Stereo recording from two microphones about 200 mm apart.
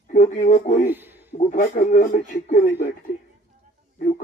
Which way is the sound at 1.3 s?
40° left (ahead or behind).